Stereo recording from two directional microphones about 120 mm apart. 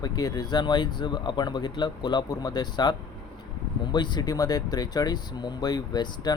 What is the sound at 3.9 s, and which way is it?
Speech, 40° left (ahead or behind).